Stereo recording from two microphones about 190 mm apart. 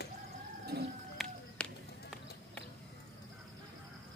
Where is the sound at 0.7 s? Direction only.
60° right (ahead or behind).